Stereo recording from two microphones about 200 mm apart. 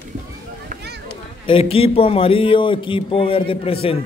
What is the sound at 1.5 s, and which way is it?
Speech, 25° left (ahead or behind).